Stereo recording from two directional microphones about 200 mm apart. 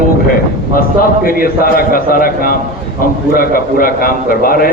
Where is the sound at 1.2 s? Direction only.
45° left (ahead or behind).